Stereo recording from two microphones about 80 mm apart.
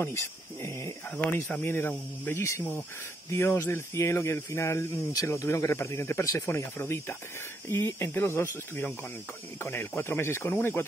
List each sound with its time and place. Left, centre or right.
0.0 s speech: left
1.5 s speech: left